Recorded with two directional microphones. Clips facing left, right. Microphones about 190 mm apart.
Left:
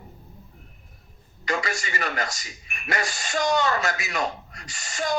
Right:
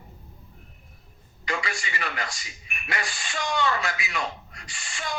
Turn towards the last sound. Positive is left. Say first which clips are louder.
# left 7 dB
turn(degrees=40)  # may be behind; listen again after turning